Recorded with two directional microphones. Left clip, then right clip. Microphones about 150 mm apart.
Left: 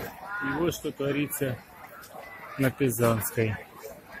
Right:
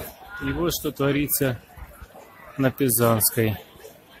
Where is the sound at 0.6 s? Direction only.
40° right (ahead or behind).